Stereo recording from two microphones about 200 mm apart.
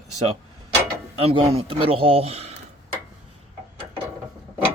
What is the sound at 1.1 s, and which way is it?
Speech, 30° right (ahead or behind).